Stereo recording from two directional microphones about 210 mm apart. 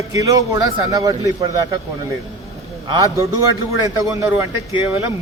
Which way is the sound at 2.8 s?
20° right (ahead or behind).